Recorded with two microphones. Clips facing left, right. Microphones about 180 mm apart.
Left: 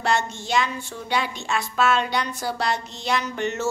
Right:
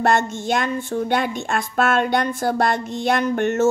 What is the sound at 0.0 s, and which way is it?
Speech, 50° right (ahead or behind).